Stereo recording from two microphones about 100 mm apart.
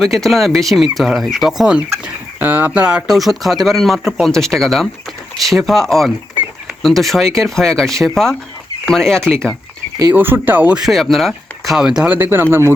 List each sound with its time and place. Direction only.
0.0 s speech: centre (ahead or behind)
2.0 s speech: 20° right (ahead or behind); by 9.6 s 5° left (ahead or behind)
10.1 s speech: 20° right (ahead or behind)
10.8 s speech: centre (ahead or behind)
12.1 s speech: 20° right (ahead or behind)